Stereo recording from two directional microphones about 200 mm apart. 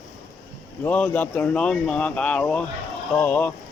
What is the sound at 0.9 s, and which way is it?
Speech, 10° left (ahead or behind).